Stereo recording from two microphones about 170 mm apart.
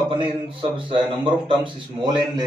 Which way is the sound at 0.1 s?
30° right (ahead or behind).